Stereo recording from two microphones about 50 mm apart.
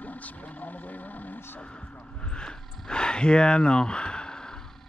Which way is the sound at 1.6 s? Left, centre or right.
Left.